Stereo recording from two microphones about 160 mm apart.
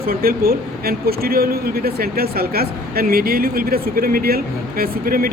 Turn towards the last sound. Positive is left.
turn(degrees=-65)  # may be behind; listen again after turning